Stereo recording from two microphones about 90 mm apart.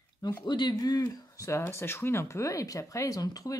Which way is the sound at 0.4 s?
55° left (ahead or behind).